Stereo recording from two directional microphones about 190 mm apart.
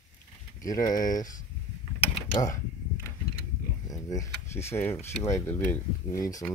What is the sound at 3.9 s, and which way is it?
Speech, 15° left (ahead or behind).